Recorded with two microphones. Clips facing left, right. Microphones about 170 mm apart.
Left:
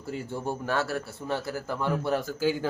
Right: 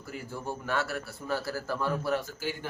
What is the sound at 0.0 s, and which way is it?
A man's voice, 25° left (ahead or behind).